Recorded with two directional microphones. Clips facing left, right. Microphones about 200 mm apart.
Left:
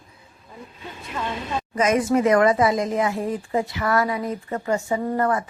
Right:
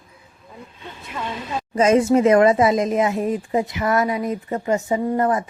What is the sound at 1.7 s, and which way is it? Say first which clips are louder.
Speech: right 4 dB; 25° right (ahead or behind).